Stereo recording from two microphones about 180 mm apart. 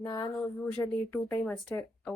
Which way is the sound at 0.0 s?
25° left (ahead or behind).